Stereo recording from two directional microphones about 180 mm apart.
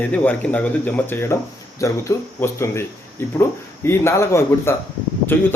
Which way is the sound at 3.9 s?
15° left (ahead or behind).